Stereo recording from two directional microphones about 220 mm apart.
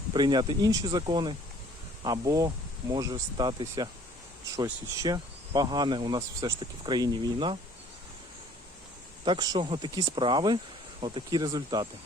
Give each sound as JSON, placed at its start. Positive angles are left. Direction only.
{"t": 0.1, "sound": "speech", "side_deg": -20}
{"t": 9.2, "sound": "speech", "side_deg": -20}